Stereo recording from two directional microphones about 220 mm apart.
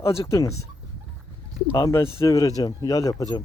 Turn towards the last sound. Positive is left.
turn(degrees=15)  # may be behind; listen again after turning